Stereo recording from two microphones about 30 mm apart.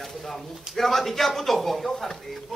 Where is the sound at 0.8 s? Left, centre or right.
Centre.